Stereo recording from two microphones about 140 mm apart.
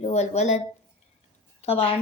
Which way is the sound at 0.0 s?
50° left (ahead or behind).